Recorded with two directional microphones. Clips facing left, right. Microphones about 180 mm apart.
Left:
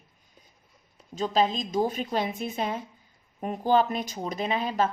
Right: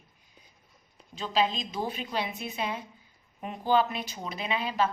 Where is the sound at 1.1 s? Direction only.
45° left (ahead or behind).